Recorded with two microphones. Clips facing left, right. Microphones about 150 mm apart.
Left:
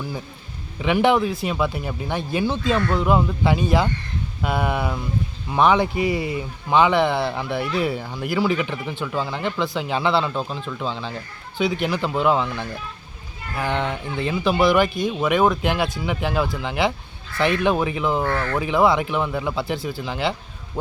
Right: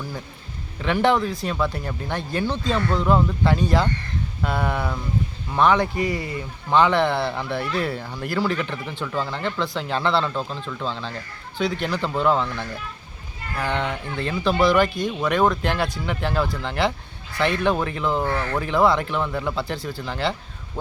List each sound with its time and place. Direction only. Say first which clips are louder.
0.8 s speech: left 2 dB; 10° left (ahead or behind)
18.2 s speech: left 1 dB; 15° right (ahead or behind)
18.6 s speech: left 1 dB; 10° left (ahead or behind)